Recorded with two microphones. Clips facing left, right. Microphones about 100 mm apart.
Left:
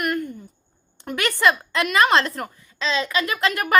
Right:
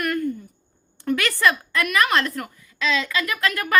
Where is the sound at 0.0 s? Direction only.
20° left (ahead or behind).